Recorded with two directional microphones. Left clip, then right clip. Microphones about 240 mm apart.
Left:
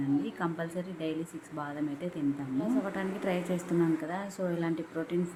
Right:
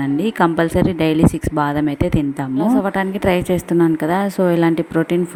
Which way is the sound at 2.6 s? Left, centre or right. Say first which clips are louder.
Right 16 dB; right.